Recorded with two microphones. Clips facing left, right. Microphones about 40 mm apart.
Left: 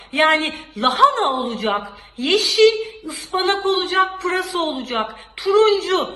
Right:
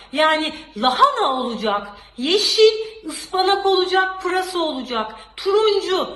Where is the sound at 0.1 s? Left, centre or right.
Left.